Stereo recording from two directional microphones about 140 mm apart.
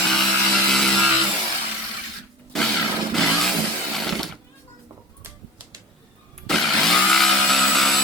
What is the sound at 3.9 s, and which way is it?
Shatter, centre (ahead or behind).